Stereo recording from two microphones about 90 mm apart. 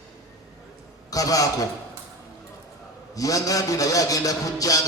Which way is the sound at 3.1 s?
40° left (ahead or behind).